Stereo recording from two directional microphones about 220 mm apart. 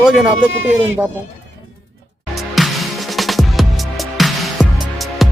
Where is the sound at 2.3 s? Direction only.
Centre (ahead or behind).